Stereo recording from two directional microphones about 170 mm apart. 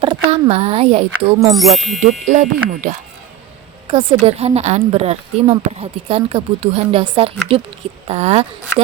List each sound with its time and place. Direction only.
0.0 s speech: 30° right (ahead or behind)
1.5 s speech: centre (ahead or behind)
2.0 s speech: 45° right (ahead or behind)
4.2 s speech: 40° right (ahead or behind)